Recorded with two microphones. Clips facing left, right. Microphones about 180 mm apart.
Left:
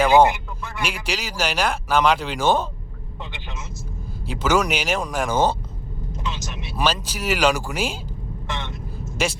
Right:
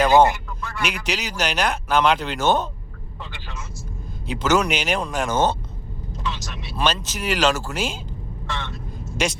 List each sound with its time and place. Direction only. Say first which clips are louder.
0.0 s a sound: even; 10° left (ahead or behind)
0.8 s speech: right 1 dB; 5° left (ahead or behind)
3.3 s vehicle: left 2 dB; 20° left (ahead or behind)
4.3 s speech: even; 10° left (ahead or behind)
6.2 s speech: right 1 dB; 20° left (ahead or behind)
6.8 s speech: even; 10° left (ahead or behind)
8.4 s vehicle: even; 20° left (ahead or behind)
9.2 s speech: even; 5° left (ahead or behind)